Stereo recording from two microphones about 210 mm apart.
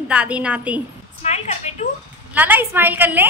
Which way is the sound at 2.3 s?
10° right (ahead or behind).